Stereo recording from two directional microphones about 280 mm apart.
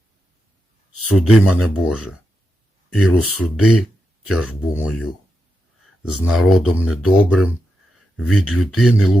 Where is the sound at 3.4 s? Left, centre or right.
Left.